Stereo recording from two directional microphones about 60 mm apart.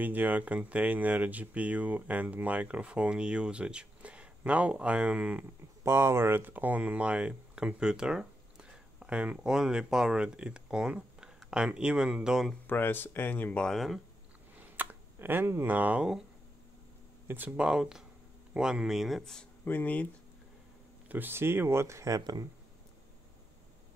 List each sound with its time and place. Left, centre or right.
0.0 s speech: right
5.9 s speech: right; by 12.4 s centre
12.6 s speech: left
13.7 s speech: centre
14.8 s a sound: right
15.6 s speech: right
17.3 s speech: right
17.6 s speech: centre
19.6 s speech: left
21.1 s speech: right